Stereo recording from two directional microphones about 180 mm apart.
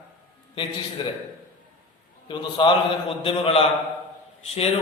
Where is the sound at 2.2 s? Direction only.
25° left (ahead or behind).